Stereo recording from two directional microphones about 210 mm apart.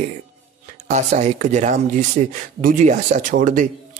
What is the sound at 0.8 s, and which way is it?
Speech, 35° right (ahead or behind).